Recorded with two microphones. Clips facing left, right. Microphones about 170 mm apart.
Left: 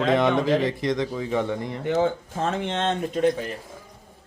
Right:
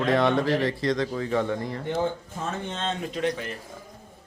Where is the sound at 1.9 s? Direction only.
85° left; by 3.0 s 70° left (ahead or behind).